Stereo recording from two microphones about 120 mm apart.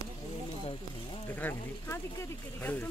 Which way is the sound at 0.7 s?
45° left (ahead or behind).